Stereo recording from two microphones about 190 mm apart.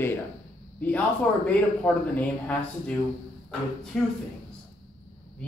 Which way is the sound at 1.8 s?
5° left (ahead or behind).